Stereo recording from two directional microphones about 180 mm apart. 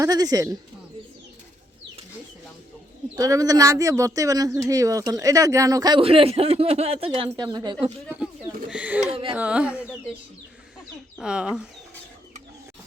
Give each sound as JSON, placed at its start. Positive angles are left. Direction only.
{"t": 0.0, "sound": "speech", "side_deg": -20}
{"t": 3.2, "sound": "speech", "side_deg": -20}
{"t": 8.7, "sound": "a sound", "side_deg": -5}
{"t": 9.3, "sound": "speech", "side_deg": -5}
{"t": 11.2, "sound": "speech", "side_deg": -5}